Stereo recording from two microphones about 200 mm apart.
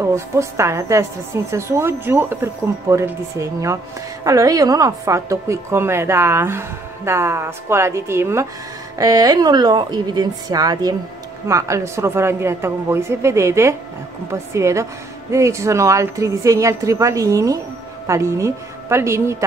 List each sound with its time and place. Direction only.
0.0 s a woman's voice: 15° right (ahead or behind)